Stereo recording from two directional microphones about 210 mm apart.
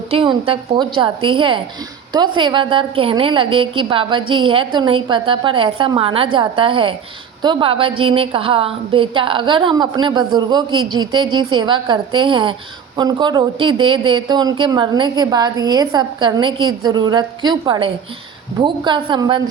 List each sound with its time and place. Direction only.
0.1 s speech: 25° right (ahead or behind)